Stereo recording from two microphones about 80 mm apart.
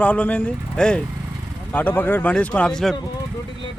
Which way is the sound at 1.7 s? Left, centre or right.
Left.